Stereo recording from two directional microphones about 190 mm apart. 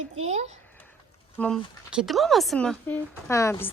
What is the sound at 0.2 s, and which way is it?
Speech, 35° right (ahead or behind).